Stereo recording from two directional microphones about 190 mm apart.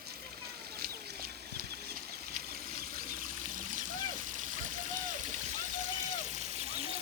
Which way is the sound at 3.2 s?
45° right (ahead or behind).